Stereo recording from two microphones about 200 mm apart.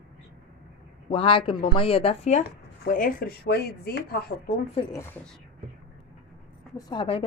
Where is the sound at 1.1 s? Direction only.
25° left (ahead or behind).